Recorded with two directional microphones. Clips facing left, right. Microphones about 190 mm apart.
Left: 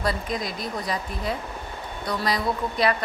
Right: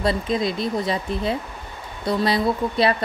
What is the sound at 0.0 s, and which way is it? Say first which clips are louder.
A woman's voice: right 6 dB; 25° right (ahead or behind).